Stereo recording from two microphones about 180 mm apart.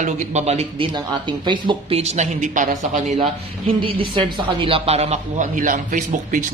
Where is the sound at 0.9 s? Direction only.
25° right (ahead or behind).